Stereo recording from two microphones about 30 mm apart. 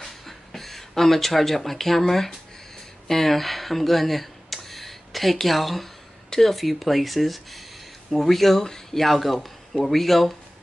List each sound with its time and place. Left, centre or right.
0.0 s a sound: centre
3.1 s speech: centre
8.6 s speech: centre
9.0 s speech: centre